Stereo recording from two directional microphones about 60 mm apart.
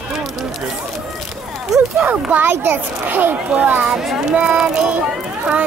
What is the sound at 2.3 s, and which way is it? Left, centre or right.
A child's voice, right.